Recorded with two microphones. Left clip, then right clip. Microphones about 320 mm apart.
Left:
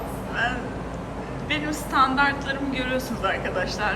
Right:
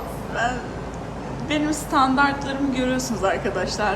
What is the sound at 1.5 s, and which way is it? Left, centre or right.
A woman's voice, centre.